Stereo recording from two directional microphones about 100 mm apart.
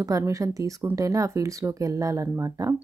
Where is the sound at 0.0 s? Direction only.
35° right (ahead or behind).